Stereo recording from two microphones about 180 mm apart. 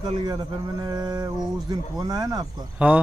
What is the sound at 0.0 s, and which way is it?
A man's voice, 25° right (ahead or behind).